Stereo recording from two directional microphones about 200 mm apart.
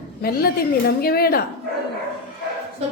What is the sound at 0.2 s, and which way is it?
A woman's voice, 50° left (ahead or behind).